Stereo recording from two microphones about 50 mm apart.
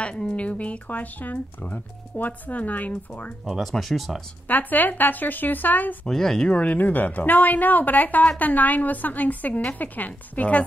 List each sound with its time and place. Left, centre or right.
0.0 s speech: centre
3.4 s speech: centre
4.5 s speech: left
6.0 s speech: centre
6.5 s speech: left
6.8 s speech: left